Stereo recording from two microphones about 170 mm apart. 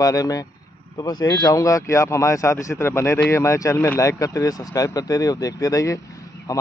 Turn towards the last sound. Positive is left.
turn(degrees=20)  # may be behind; listen again after turning